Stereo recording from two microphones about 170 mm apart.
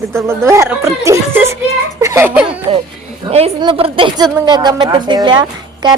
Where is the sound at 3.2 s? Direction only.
25° right (ahead or behind).